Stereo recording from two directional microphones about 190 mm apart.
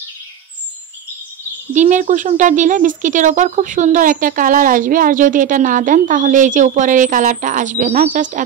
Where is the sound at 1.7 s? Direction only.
40° right (ahead or behind).